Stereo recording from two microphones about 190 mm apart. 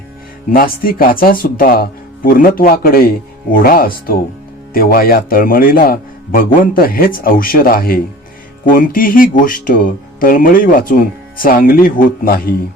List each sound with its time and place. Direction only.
0.5 s speech: 50° left (ahead or behind)